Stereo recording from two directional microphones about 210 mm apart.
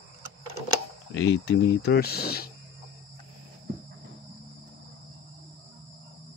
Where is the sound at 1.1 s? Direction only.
60° left (ahead or behind).